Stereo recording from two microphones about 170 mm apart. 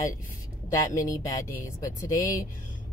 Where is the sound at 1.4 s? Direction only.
15° left (ahead or behind).